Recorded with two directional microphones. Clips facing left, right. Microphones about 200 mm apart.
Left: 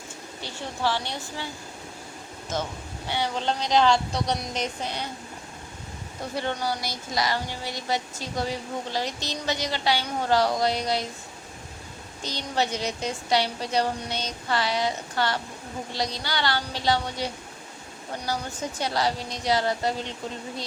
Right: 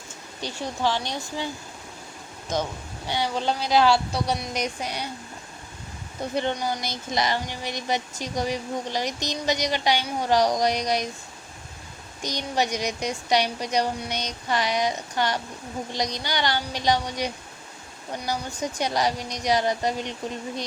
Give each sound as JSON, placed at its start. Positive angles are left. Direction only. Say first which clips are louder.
{"t": 0.4, "sound": "speech", "louder": "right 2 dB", "side_deg": -15}
{"t": 3.1, "sound": "speech", "louder": "right 2 dB", "side_deg": -15}
{"t": 6.3, "sound": "speech", "louder": "right 2 dB", "side_deg": -20}
{"t": 12.2, "sound": "speech", "louder": "right 2 dB", "side_deg": -15}
{"t": 18.8, "sound": "speech", "louder": "right 1 dB", "side_deg": -15}